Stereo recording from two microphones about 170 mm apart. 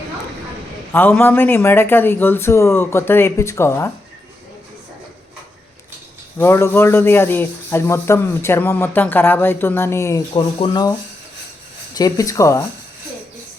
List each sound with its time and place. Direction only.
0.9 s speech: 10° left (ahead or behind)
6.4 s speech: 15° left (ahead or behind)
11.9 s speech: 20° left (ahead or behind)